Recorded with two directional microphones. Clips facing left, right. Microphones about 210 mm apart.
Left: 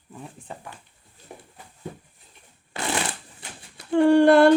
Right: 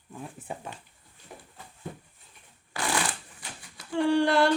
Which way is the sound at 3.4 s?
55° left (ahead or behind).